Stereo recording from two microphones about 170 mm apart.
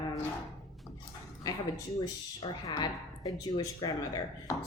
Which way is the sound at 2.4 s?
25° left (ahead or behind).